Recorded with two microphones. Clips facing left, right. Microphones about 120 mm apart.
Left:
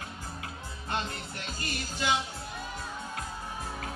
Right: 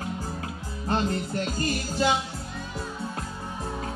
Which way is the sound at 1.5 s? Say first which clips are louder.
Right 7 dB; 40° right (ahead or behind).